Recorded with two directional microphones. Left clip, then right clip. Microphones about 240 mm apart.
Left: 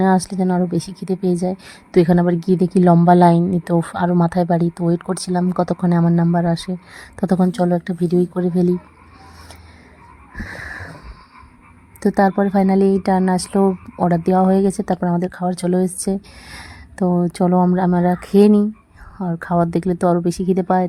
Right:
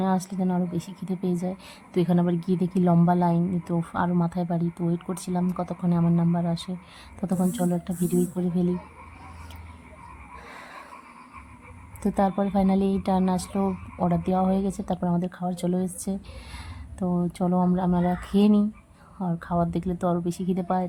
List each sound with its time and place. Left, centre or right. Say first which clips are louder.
0.0 s a woman's voice: left 10 dB; left
12.0 s a woman's voice: left 9 dB; left